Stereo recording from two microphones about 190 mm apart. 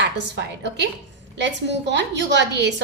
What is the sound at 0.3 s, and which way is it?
A woman's voice, 65° right (ahead or behind).